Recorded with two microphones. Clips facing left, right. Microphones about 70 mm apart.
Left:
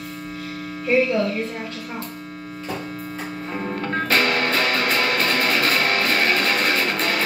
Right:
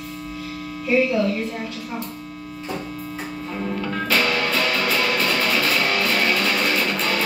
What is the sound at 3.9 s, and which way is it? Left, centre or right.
Music, left.